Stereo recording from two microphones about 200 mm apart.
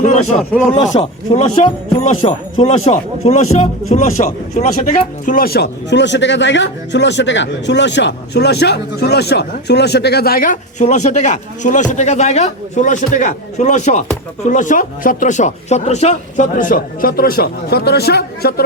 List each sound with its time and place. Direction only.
0.0 s a man's voice: 35° left (ahead or behind); by 18.6 s 50° left (ahead or behind)